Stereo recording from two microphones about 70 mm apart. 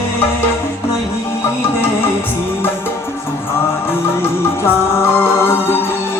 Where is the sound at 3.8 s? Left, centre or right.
Left.